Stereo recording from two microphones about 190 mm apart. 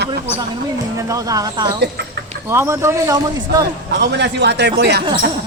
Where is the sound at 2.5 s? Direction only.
15° right (ahead or behind).